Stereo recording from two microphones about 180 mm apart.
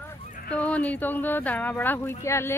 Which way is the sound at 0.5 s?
5° left (ahead or behind).